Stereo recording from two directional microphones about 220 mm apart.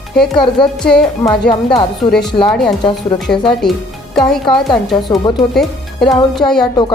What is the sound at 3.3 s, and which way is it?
A woman's voice, centre (ahead or behind).